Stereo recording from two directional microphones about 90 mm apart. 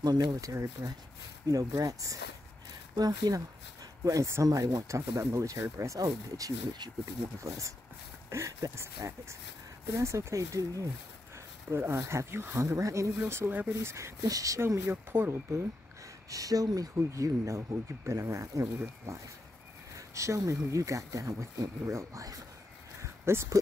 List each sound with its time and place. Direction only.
0.0 s speech: 45° right (ahead or behind)
0.5 s speech: 30° right (ahead or behind)
6.0 s speech: 45° right (ahead or behind)
7.3 s speech: 35° right (ahead or behind)
13.2 s speech: 25° right (ahead or behind)
16.3 s speech: 40° right (ahead or behind)